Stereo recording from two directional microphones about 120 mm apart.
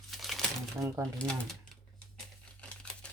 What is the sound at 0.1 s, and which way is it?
Crumpling, centre (ahead or behind).